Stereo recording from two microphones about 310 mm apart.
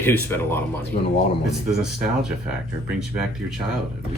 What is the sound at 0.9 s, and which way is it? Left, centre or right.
Speech, left.